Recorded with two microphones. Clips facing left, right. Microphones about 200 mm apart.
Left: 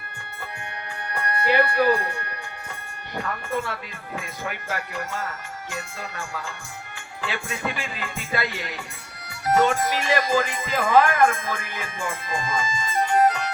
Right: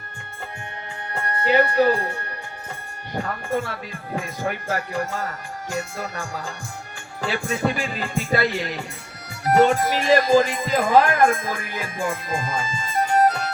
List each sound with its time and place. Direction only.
1.1 s speech: 25° right (ahead or behind)
3.2 s music: 40° right (ahead or behind)